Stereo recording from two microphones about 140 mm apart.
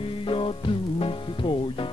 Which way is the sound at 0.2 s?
40° left (ahead or behind).